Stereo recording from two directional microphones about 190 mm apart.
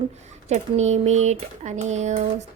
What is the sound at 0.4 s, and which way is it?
Speech, 35° right (ahead or behind).